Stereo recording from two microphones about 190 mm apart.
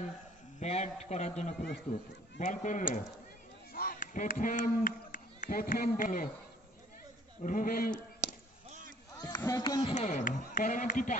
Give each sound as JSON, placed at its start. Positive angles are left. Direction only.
{"t": 0.6, "sound": "speech", "side_deg": 35}
{"t": 7.4, "sound": "a man's voice", "side_deg": 45}
{"t": 9.2, "sound": "speech", "side_deg": 20}
{"t": 9.9, "sound": "speech", "side_deg": 40}